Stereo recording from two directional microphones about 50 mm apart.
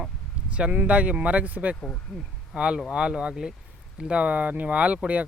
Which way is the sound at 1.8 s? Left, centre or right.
Left.